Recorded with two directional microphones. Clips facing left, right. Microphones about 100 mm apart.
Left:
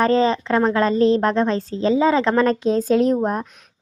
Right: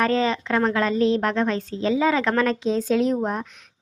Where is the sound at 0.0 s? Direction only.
35° left (ahead or behind).